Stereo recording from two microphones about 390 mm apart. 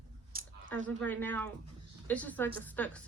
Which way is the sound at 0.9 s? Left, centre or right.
Centre.